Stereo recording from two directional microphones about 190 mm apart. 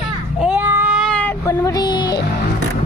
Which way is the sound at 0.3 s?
5° right (ahead or behind).